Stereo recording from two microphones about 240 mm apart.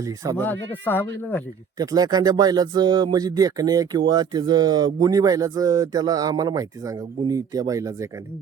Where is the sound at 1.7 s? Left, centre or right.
Centre.